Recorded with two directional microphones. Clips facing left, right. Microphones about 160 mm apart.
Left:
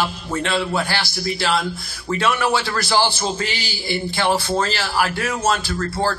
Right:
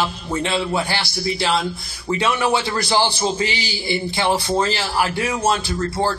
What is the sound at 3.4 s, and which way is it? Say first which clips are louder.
Speech: right 3 dB; 50° left (ahead or behind).